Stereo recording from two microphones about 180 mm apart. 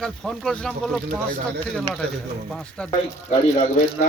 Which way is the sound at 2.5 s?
5° left (ahead or behind).